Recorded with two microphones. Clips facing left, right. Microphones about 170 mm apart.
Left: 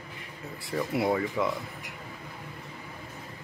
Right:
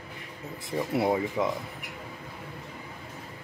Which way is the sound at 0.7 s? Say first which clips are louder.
Right 1 dB; 20° right (ahead or behind).